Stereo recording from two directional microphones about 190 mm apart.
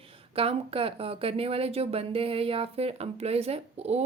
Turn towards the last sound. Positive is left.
turn(degrees=-35)  # may be behind; listen again after turning